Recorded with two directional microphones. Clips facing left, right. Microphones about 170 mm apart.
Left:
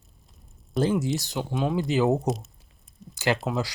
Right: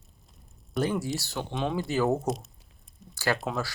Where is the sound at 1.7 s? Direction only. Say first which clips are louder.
Left 3 dB; 20° left (ahead or behind).